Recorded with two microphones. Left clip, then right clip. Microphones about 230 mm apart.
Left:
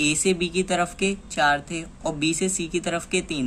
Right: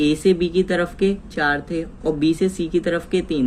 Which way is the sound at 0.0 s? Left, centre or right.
Left.